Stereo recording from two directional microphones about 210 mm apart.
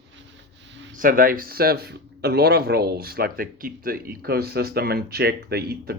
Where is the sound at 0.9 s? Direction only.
40° right (ahead or behind).